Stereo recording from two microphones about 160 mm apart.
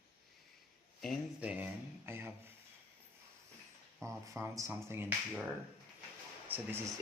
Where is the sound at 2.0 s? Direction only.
15° right (ahead or behind).